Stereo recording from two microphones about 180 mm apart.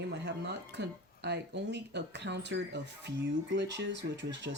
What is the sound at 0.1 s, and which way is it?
Speech, 75° right (ahead or behind).